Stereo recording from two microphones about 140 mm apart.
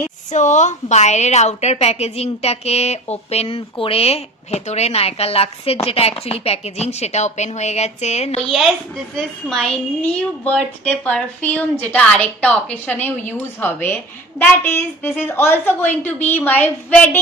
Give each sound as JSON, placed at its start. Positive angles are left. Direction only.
{"t": 0.3, "sound": "a woman's voice", "side_deg": 60}
{"t": 8.4, "sound": "a woman's voice", "side_deg": 0}